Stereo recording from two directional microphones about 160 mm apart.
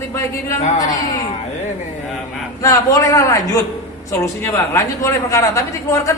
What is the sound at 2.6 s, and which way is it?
A woman's voice, 20° left (ahead or behind).